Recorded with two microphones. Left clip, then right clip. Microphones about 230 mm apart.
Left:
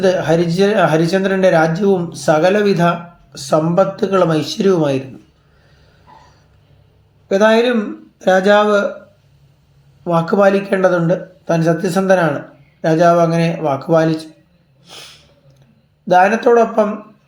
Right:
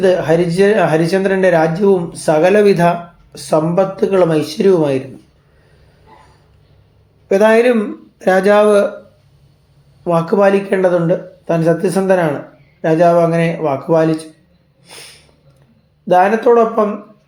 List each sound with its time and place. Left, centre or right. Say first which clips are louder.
0.0 s speech: right 2 dB; centre
7.3 s speech: right 2 dB; centre
10.0 s speech: right 1 dB; centre
16.0 s speech: right 1 dB; centre